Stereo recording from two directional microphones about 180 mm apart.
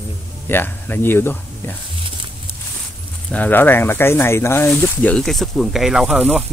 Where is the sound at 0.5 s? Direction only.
10° left (ahead or behind).